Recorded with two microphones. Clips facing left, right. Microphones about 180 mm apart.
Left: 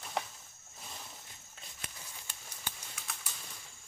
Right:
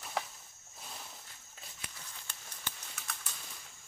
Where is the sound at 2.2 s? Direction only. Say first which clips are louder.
Even; 10° left (ahead or behind).